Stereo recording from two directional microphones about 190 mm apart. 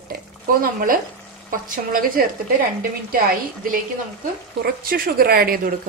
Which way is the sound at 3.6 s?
45° right (ahead or behind).